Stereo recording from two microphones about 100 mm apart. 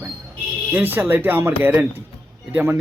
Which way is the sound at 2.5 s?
20° right (ahead or behind).